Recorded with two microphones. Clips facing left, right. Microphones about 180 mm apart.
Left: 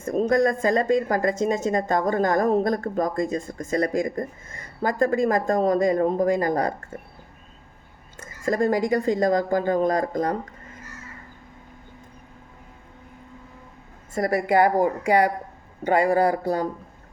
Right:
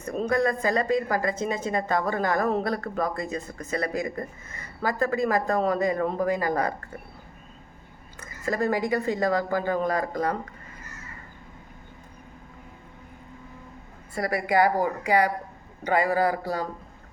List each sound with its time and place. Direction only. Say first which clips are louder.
0.0 s speech: left 4 dB; 40° left (ahead or behind)
8.2 s speech: left 4 dB; 45° left (ahead or behind)
14.1 s speech: left 4 dB; 45° left (ahead or behind)